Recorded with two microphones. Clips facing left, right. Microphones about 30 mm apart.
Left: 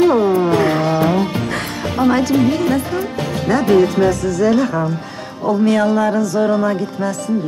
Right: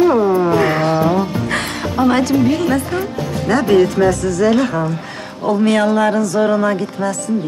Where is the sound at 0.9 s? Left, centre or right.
Centre.